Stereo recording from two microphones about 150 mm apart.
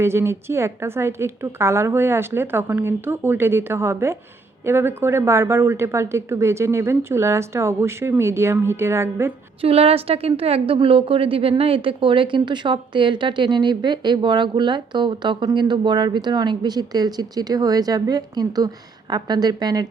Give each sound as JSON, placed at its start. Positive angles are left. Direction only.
{"t": 0.0, "sound": "speech", "side_deg": -15}
{"t": 9.6, "sound": "a woman's voice", "side_deg": -40}